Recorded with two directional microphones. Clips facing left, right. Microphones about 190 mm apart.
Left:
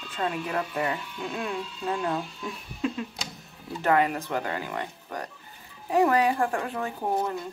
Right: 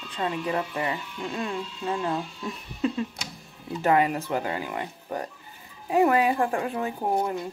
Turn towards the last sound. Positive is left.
turn(degrees=-15)  # may be behind; listen again after turning